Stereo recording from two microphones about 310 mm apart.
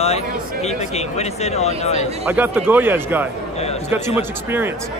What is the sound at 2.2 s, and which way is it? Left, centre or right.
Speech, centre.